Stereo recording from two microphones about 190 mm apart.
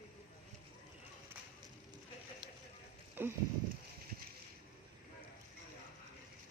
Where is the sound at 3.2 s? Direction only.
10° right (ahead or behind).